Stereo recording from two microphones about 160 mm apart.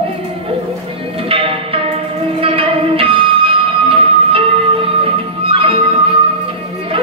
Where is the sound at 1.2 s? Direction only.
35° right (ahead or behind).